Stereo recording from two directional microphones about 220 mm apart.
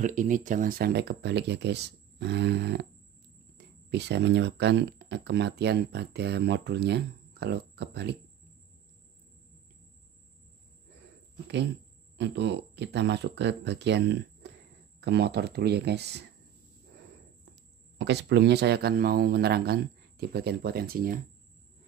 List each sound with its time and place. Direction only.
0.0 s speech: 35° right (ahead or behind)
12.2 s speech: 50° right (ahead or behind)
17.9 s speech: 50° right (ahead or behind)